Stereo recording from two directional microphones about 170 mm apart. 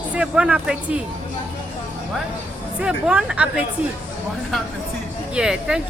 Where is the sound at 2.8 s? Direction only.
5° right (ahead or behind).